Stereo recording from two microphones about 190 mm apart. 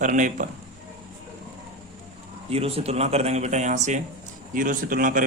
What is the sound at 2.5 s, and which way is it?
A man's voice, 30° right (ahead or behind).